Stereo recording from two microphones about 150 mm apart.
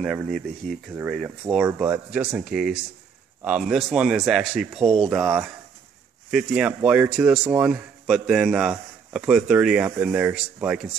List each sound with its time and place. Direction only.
0.0 s speech: centre (ahead or behind)
4.8 s speech: 40° right (ahead or behind)
5.1 s speech: 5° right (ahead or behind)